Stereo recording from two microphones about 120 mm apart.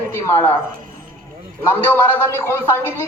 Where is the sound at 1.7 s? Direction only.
20° left (ahead or behind).